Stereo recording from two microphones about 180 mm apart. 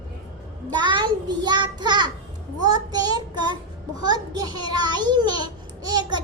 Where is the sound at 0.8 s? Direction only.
25° right (ahead or behind).